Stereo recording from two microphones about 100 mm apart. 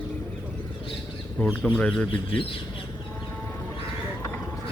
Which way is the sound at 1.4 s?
15° left (ahead or behind).